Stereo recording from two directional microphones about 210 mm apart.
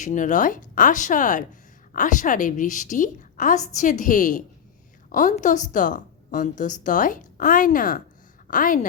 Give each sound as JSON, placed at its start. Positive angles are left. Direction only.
{"t": 0.0, "sound": "a woman's voice", "side_deg": 35}